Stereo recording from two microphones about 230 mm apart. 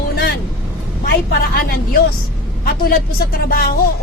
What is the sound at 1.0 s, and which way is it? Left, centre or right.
Speech, left.